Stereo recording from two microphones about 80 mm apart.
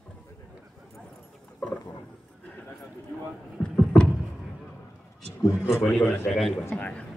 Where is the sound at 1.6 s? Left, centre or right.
Centre.